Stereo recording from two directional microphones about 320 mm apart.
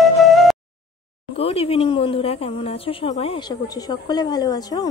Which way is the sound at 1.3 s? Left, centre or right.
Centre.